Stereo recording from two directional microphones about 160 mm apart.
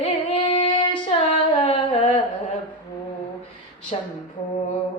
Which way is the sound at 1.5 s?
35° left (ahead or behind).